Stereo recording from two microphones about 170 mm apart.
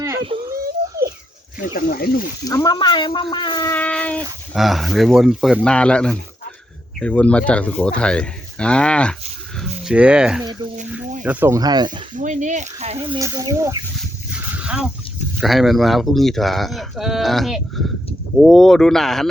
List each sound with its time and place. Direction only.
1.5 s speech: 55° left (ahead or behind)
2.5 s speech: 20° left (ahead or behind)
3.8 s speech: 5° left (ahead or behind)
9.6 s speech: 5° right (ahead or behind)
10.4 s a sound: 25° right (ahead or behind)
11.2 s speech: 10° right (ahead or behind)
12.1 s speech: 50° right (ahead or behind)
13.1 s speech: 20° right (ahead or behind)
14.3 s a sound: 5° right (ahead or behind)
15.4 s speech: centre (ahead or behind)